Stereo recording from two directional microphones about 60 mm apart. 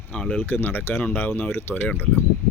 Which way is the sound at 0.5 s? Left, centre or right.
Left.